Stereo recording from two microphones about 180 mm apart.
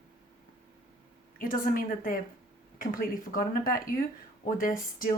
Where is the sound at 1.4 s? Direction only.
50° left (ahead or behind).